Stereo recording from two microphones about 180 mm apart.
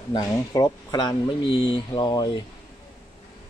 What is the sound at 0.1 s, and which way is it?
Speech, 20° left (ahead or behind).